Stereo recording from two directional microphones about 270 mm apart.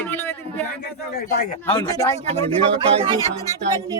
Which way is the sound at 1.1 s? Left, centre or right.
Left.